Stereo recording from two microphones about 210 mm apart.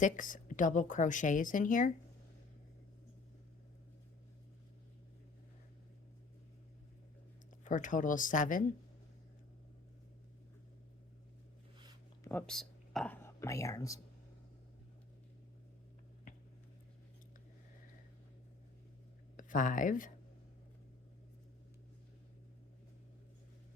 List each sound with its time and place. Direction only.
0.0 s a woman's voice: 40° left (ahead or behind)
7.6 s a woman's voice: 40° left (ahead or behind)
12.2 s a sound: 10° left (ahead or behind)
13.2 s speech: 15° left (ahead or behind)
19.4 s speech: 40° left (ahead or behind)